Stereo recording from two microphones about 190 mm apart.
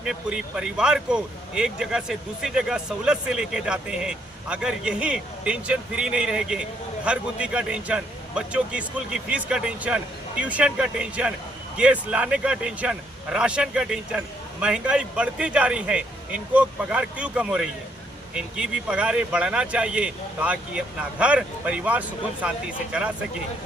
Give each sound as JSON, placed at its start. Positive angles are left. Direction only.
{"t": 0.0, "sound": "a man's voice", "side_deg": -5}